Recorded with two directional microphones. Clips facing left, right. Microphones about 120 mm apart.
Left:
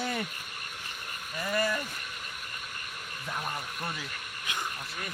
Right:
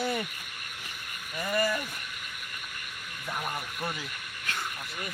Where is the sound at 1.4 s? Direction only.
Centre (ahead or behind).